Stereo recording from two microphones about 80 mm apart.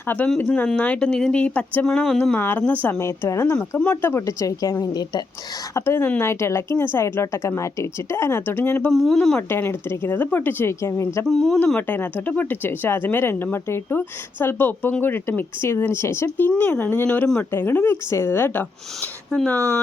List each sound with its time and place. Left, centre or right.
0.3 s speech: centre
3.0 s a woman's voice: left
3.4 s a woman's voice: left
5.7 s a woman's voice: left
8.9 s speech: centre
9.5 s a woman's voice: left
11.3 s speech: centre
11.8 s speech: left
16.6 s speech: left
19.3 s speech: centre